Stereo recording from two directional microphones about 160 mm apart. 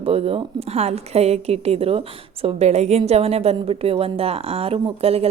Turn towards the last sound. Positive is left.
turn(degrees=-40)  # may be behind; listen again after turning